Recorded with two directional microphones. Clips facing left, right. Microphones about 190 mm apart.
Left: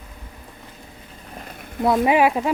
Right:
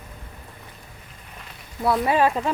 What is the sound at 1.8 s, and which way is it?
Speech, 20° left (ahead or behind).